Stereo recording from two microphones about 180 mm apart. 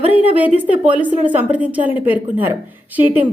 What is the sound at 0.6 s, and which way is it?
A woman's voice, 10° right (ahead or behind).